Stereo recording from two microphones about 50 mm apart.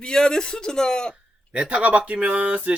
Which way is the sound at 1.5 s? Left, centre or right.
Right.